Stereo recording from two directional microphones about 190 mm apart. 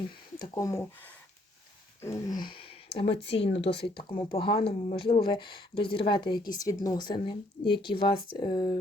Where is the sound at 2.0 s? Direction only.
15° left (ahead or behind).